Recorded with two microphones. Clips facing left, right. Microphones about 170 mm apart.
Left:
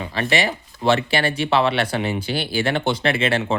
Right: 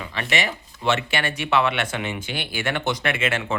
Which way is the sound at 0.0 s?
35° left (ahead or behind).